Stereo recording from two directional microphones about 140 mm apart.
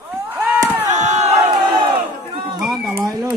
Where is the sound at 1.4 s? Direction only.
35° right (ahead or behind).